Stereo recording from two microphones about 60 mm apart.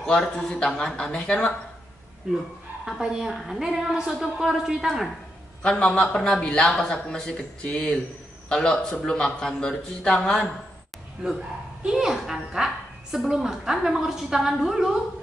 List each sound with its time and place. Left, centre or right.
0.0 s a man's voice: centre
2.3 s a woman's voice: centre
5.6 s a man's voice: centre
11.2 s a woman's voice: centre